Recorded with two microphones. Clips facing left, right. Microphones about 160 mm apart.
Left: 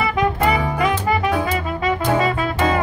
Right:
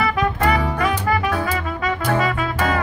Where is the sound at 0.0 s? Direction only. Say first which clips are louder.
Left 1 dB; 15° left (ahead or behind).